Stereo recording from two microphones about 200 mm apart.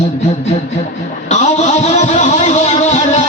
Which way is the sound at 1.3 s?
35° left (ahead or behind).